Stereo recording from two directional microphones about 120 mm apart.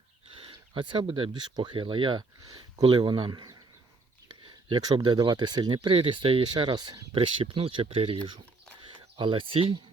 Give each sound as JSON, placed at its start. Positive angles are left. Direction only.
{"t": 0.3, "sound": "speech", "side_deg": -45}
{"t": 7.2, "sound": "speech", "side_deg": -50}